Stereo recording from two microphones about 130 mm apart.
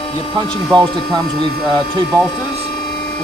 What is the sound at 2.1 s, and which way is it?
Speech, 20° right (ahead or behind).